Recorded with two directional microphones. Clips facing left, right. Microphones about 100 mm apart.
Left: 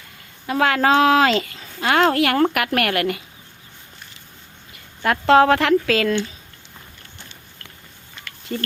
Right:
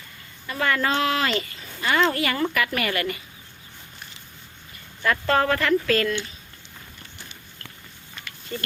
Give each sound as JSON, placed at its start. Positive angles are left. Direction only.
{"t": 0.4, "sound": "a woman's voice", "side_deg": 90}
{"t": 5.0, "sound": "speech", "side_deg": 70}
{"t": 8.2, "sound": "a sound", "side_deg": 20}